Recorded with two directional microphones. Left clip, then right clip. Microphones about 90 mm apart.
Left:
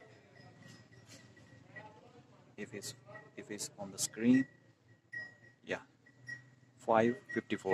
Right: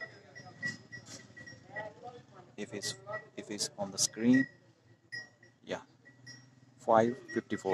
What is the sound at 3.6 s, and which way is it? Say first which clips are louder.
Speech: right 10 dB; 25° right (ahead or behind).